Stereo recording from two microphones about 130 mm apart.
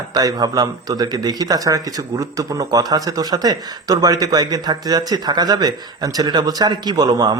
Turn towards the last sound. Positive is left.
turn(degrees=-30)  # may be behind; listen again after turning